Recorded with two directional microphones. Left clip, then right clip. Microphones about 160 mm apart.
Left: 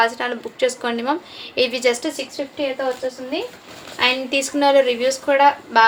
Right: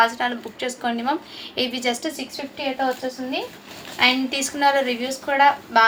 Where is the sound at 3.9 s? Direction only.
25° left (ahead or behind).